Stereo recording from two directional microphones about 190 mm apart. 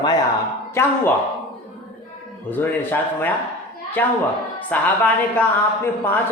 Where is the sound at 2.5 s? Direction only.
10° left (ahead or behind).